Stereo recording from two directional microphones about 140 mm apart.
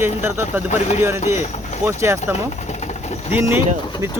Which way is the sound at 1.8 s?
20° right (ahead or behind).